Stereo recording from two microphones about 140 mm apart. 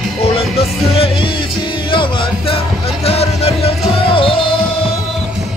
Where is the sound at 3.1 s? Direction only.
45° left (ahead or behind).